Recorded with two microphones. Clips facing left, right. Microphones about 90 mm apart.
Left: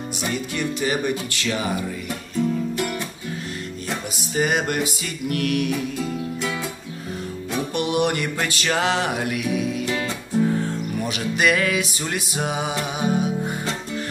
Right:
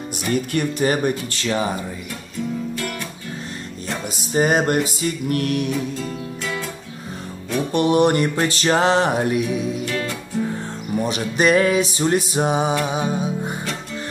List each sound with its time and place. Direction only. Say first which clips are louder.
0.3 s music: right 6 dB; 45° right (ahead or behind)
4.3 s music: right 4 dB; 40° right (ahead or behind)
7.7 s music: right 6 dB; 35° right (ahead or behind)
9.8 s music: even; 25° left (ahead or behind)
11.0 s music: right 4 dB; 30° right (ahead or behind)